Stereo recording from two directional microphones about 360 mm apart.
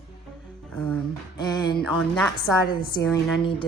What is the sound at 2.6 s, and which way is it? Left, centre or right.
A woman's voice, left.